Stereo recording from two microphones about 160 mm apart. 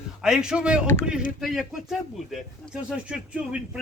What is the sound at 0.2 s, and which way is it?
Speech, 5° right (ahead or behind).